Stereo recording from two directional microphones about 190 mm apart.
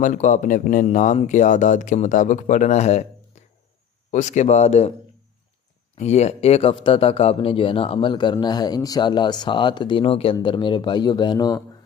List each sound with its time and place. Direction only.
0.0 s speech: 40° left (ahead or behind)
6.0 s speech: 35° left (ahead or behind)